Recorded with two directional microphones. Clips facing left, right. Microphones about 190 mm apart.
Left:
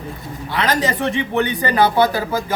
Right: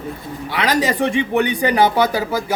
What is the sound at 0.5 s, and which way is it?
Speech, 15° right (ahead or behind).